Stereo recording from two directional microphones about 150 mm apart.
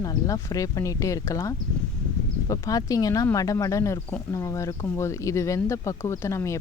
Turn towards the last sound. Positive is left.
turn(degrees=20)  # may be behind; listen again after turning